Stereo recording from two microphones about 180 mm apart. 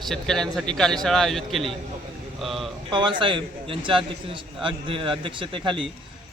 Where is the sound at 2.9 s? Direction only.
25° right (ahead or behind).